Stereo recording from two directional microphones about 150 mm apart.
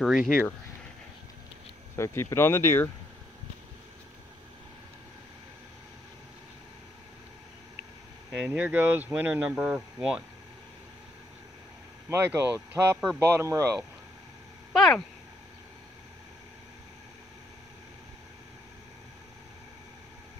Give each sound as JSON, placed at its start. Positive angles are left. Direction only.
{"t": 0.0, "sound": "speech", "side_deg": -5}
{"t": 2.0, "sound": "speech", "side_deg": 15}
{"t": 8.3, "sound": "speech", "side_deg": -10}
{"t": 12.1, "sound": "speech", "side_deg": -15}
{"t": 14.7, "sound": "speech", "side_deg": 5}